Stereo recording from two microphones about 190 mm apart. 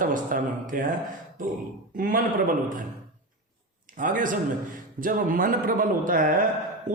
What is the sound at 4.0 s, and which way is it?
A man's voice, 45° right (ahead or behind).